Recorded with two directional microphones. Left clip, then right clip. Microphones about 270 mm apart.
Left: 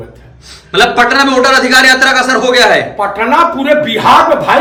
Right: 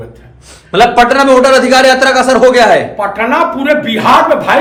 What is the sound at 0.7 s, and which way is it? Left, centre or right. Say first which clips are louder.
A man's voice: right 1 dB; centre.